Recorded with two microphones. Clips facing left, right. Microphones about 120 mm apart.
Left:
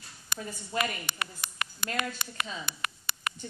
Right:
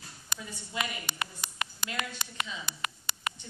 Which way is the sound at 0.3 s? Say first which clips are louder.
Left 5 dB; 60° left (ahead or behind).